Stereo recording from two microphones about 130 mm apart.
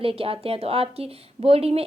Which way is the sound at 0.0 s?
45° right (ahead or behind).